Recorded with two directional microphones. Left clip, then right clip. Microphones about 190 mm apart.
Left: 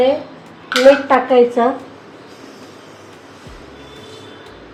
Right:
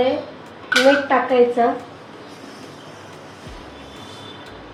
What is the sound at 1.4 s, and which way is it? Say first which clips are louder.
Speech: left 3 dB; 50° left (ahead or behind).